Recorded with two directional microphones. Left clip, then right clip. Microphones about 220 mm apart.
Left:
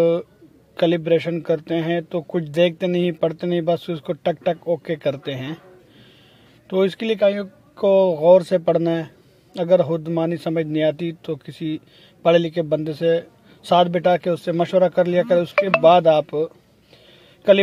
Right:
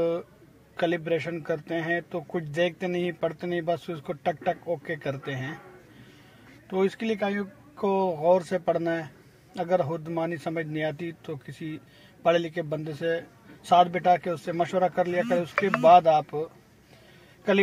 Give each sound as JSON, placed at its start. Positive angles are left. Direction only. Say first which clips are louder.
{"t": 0.0, "sound": "a man's voice", "louder": "left 9 dB", "side_deg": 45}
{"t": 6.7, "sound": "speech", "louder": "left 7 dB", "side_deg": 45}